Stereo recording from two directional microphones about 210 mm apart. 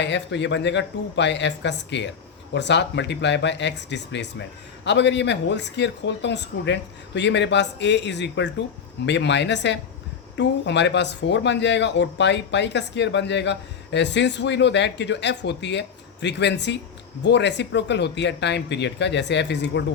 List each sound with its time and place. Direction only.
0.0 s speech: 55° left (ahead or behind)